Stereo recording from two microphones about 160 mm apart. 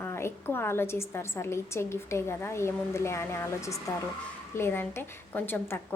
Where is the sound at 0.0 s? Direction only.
15° left (ahead or behind).